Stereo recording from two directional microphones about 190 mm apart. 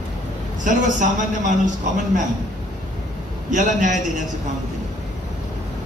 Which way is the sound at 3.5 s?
40° right (ahead or behind).